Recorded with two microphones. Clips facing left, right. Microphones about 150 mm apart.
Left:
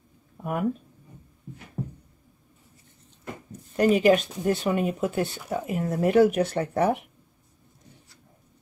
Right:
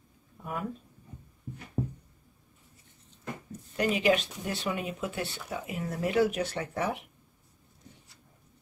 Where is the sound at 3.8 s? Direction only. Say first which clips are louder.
Left 7 dB; 45° left (ahead or behind).